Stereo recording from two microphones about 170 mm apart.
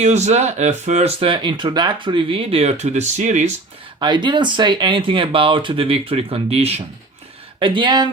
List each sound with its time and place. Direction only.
0.0 s speech: 40° right (ahead or behind)
4.0 s speech: 25° right (ahead or behind)